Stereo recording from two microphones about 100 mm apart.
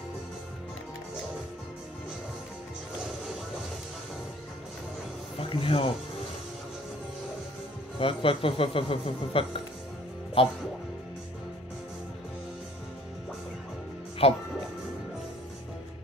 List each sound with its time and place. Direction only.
5.4 s speech: 65° left (ahead or behind)
8.0 s speech: 65° left (ahead or behind)
14.2 s speech: 75° left (ahead or behind)